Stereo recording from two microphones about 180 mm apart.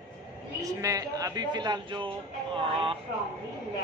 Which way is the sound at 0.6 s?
20° right (ahead or behind).